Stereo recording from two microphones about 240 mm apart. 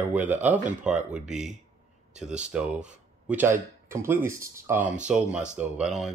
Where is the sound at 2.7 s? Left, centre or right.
Right.